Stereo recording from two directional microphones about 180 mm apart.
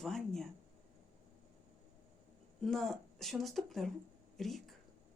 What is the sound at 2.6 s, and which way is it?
Speech, centre (ahead or behind).